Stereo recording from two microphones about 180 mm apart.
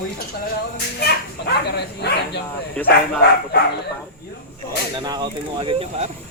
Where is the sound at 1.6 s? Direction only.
65° left (ahead or behind).